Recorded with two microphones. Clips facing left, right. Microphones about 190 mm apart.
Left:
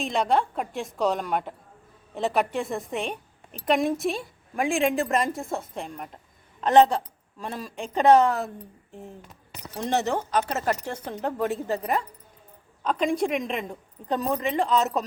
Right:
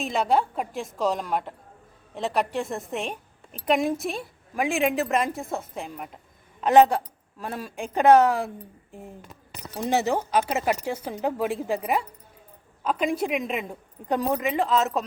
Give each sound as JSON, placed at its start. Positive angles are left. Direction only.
{"t": 0.0, "sound": "a woman's voice", "side_deg": -5}